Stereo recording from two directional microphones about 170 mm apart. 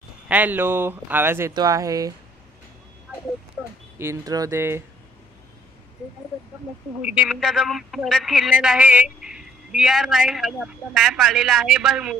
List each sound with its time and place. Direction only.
0.3 s speech: 10° right (ahead or behind)
3.1 s a sound: 10° right (ahead or behind)
4.0 s speech: 20° right (ahead or behind)
7.0 s speech: 10° right (ahead or behind)